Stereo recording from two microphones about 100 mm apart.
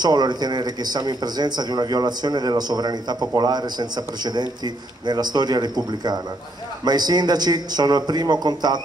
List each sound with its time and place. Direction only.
0.0 s speech: 45° right (ahead or behind)